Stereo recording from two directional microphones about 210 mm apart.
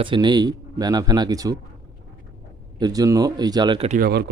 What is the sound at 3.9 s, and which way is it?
Speech, 45° right (ahead or behind).